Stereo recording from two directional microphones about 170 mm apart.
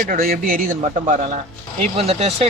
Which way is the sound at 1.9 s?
35° right (ahead or behind).